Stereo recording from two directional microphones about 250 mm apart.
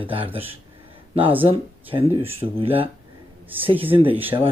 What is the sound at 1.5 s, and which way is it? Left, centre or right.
Speech, right.